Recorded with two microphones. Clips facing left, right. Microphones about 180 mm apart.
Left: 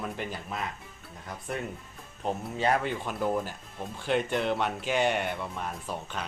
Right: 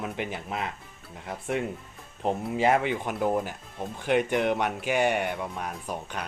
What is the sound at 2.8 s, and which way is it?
Speech, 15° right (ahead or behind).